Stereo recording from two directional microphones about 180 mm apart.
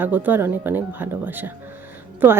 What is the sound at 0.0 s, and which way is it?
Speech, 10° right (ahead or behind).